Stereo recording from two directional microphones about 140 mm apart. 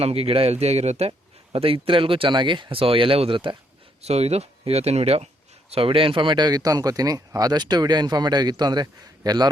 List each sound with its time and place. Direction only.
0.0 s speech: 45° right (ahead or behind)
4.0 s speech: 50° right (ahead or behind); by 9.5 s 30° right (ahead or behind)